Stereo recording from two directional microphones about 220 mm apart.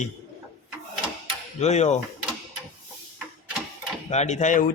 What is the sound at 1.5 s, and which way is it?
Speech, 30° left (ahead or behind).